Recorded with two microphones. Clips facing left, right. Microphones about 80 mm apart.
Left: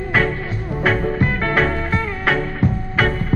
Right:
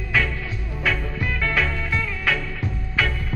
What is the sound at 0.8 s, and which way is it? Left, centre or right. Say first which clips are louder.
Music: left 7 dB; left.